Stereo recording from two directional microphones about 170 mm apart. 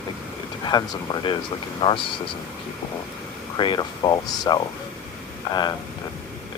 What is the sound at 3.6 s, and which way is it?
Speech, 25° left (ahead or behind).